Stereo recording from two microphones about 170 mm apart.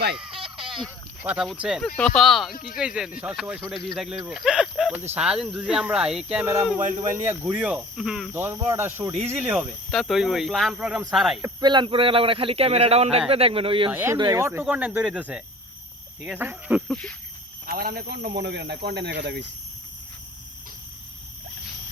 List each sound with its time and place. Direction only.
0.2 s a sound: 30° right (ahead or behind)
0.9 s speech: 10° right (ahead or behind)
2.5 s speech: 60° left (ahead or behind)
2.7 s speech: 5° right (ahead or behind)
6.7 s speech: 45° right (ahead or behind)
7.4 s speech: 5° right (ahead or behind)
8.3 s speech: 15° right (ahead or behind)
9.9 s speech: centre (ahead or behind)
11.4 s speech: 25° right (ahead or behind)
13.9 s speech: 15° right (ahead or behind)
16.9 s speech: 5° left (ahead or behind)
17.7 s speech: 60° right (ahead or behind); by 19.5 s 90° right